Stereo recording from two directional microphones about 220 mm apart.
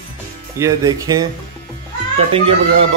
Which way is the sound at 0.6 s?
15° right (ahead or behind).